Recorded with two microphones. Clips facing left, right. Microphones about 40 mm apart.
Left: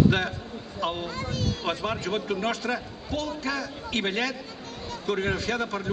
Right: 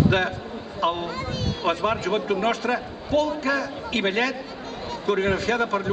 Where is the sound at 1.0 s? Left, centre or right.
Right.